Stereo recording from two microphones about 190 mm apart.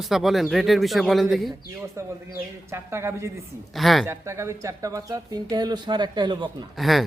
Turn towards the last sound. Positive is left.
turn(degrees=0)  # may be behind; listen again after turning